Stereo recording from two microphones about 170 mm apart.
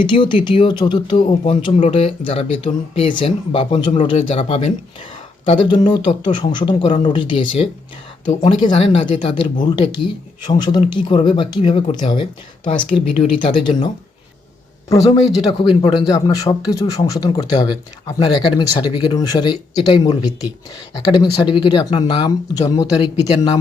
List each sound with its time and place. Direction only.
0.0 s speech: 30° left (ahead or behind)